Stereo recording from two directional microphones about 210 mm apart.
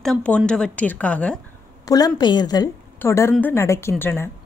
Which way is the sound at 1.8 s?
15° left (ahead or behind).